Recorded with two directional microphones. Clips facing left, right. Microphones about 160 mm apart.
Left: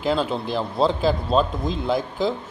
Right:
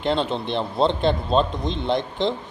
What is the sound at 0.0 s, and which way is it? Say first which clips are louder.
Speech: even; 5° left (ahead or behind).